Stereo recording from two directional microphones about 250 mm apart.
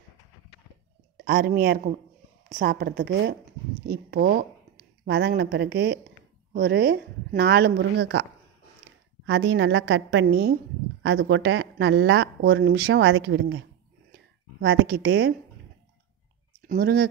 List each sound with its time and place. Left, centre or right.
1.1 s a woman's voice: right
14.6 s speech: right
16.6 s speech: right